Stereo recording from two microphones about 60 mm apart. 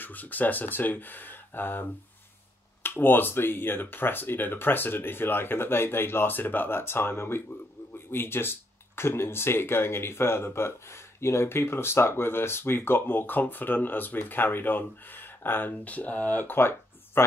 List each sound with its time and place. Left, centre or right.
0.0 s speech: left